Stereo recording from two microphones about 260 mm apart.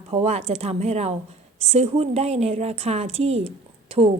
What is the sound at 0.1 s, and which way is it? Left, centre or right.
A woman's voice, right.